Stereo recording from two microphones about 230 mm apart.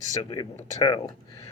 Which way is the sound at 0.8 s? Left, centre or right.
Centre.